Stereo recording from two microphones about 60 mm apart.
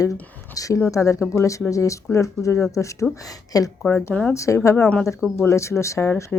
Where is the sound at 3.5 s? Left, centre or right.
Left.